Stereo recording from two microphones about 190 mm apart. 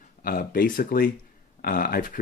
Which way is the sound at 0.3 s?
50° left (ahead or behind).